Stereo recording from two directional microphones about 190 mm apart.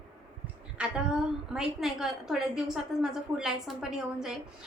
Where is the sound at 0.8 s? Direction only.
5° right (ahead or behind).